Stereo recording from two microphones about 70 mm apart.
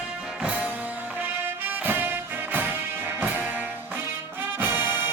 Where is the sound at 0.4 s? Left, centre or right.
Centre.